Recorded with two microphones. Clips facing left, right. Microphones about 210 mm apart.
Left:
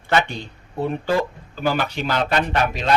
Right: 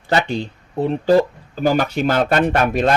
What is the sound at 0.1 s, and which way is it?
Speech, 40° right (ahead or behind).